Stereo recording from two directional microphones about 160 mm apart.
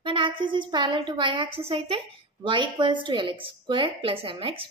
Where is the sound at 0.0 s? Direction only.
30° right (ahead or behind).